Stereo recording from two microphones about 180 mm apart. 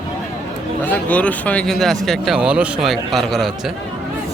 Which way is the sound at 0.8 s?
10° left (ahead or behind).